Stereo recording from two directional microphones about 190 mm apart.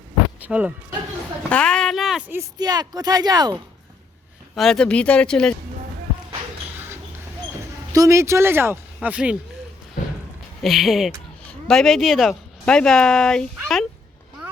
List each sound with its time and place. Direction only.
0.3 s speech: 10° right (ahead or behind)
1.5 s speech: 5° left (ahead or behind); by 3.6 s 20° right (ahead or behind)
4.5 s speech: centre (ahead or behind)
7.9 s speech: 15° right (ahead or behind)
10.6 s speech: centre (ahead or behind)